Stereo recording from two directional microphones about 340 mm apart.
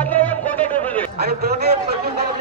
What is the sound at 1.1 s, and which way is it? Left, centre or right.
A man's voice, right.